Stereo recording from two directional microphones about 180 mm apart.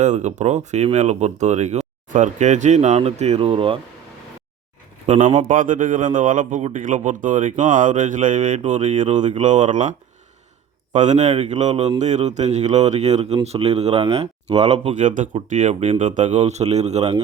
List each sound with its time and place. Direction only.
0.0 s speech: 40° right (ahead or behind)
5.0 s a man's voice: 40° right (ahead or behind)
10.9 s speech: 40° right (ahead or behind)